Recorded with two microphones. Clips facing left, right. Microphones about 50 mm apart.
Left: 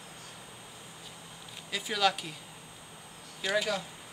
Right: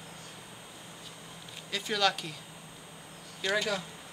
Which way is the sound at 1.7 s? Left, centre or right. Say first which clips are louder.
Even; centre.